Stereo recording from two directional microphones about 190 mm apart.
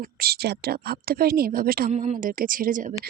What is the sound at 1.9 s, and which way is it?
Speech, 35° right (ahead or behind).